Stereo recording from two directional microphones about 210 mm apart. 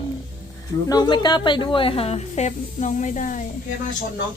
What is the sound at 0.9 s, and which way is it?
Speech, 20° left (ahead or behind).